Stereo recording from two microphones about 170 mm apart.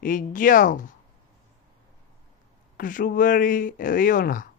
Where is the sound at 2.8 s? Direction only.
50° left (ahead or behind).